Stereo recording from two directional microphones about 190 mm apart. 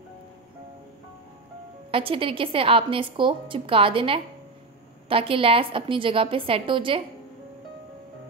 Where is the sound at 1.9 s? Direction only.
30° right (ahead or behind).